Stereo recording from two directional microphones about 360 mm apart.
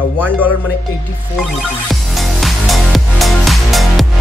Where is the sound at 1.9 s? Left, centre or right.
Centre.